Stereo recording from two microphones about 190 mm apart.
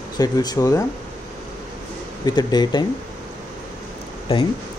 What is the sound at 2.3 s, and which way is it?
Speech, 20° left (ahead or behind).